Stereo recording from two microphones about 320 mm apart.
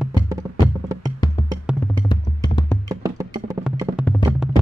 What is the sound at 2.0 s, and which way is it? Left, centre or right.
Music, centre.